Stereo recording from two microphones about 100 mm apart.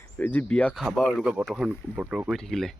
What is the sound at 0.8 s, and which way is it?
Speech, centre (ahead or behind).